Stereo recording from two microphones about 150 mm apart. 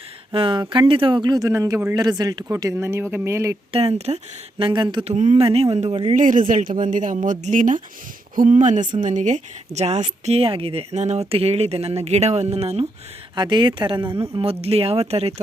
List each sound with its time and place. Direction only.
0.3 s speech: 35° right (ahead or behind); by 3.6 s 20° right (ahead or behind)
3.7 s a woman's voice: 40° right (ahead or behind)
5.0 s speech: 50° right (ahead or behind)
6.1 s speech: 60° right (ahead or behind); by 12.9 s 40° right (ahead or behind)
13.3 s a woman's voice: 30° right (ahead or behind)